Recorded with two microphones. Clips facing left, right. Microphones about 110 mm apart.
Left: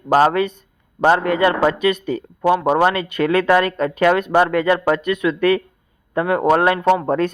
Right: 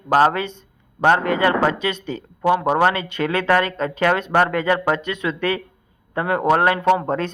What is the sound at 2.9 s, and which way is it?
Speech, 25° right (ahead or behind).